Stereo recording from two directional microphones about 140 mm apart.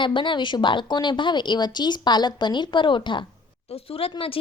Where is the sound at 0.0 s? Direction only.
35° left (ahead or behind).